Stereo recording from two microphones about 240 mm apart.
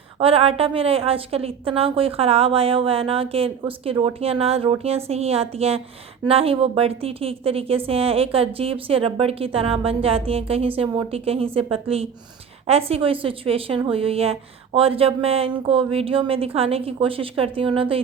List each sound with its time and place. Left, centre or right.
0.2 s a woman's voice: right